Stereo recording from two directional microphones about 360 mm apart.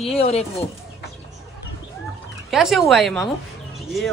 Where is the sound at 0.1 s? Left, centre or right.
Centre.